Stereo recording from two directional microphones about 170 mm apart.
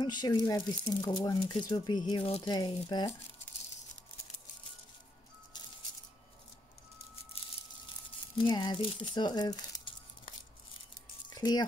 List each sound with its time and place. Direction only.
0.0 s speech: 25° left (ahead or behind)
8.4 s speech: 25° left (ahead or behind)
11.2 s a sound: 25° left (ahead or behind)